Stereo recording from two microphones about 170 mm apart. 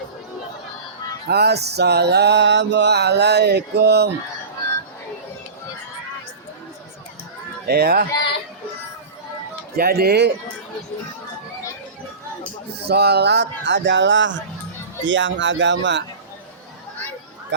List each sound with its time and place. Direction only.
1.3 s music: 75° right (ahead or behind)
7.7 s speech: 65° right (ahead or behind)
9.7 s music: 65° right (ahead or behind)
12.9 s speech: 70° right (ahead or behind); by 16.0 s 90° right